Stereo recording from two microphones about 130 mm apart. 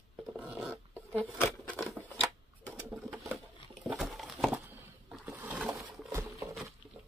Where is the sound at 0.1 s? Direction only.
Centre (ahead or behind).